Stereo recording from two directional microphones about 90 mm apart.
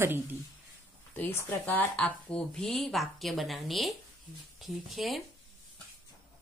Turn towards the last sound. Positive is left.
turn(degrees=0)  # may be behind; listen again after turning